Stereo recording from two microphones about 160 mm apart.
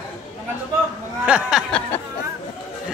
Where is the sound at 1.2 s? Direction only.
5° right (ahead or behind).